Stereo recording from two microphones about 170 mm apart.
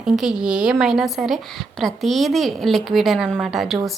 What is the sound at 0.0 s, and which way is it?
A woman's voice, 5° right (ahead or behind).